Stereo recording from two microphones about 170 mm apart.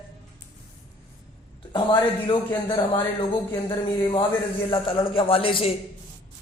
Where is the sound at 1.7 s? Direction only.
30° left (ahead or behind).